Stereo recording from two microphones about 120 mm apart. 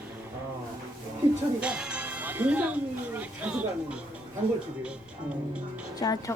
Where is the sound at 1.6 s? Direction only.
10° right (ahead or behind).